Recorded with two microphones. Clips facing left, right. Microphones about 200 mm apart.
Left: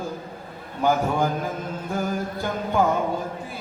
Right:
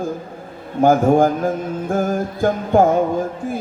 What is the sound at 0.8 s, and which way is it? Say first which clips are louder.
Mantra: right 9 dB; 50° right (ahead or behind).